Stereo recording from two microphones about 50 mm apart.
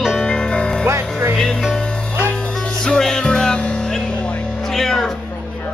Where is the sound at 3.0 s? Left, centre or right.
Centre.